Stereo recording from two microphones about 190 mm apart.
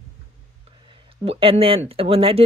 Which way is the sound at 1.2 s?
30° right (ahead or behind).